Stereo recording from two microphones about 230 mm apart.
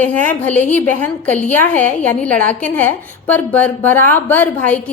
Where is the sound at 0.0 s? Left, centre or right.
Centre.